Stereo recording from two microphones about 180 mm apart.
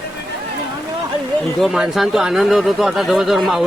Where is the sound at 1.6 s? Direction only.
Centre (ahead or behind).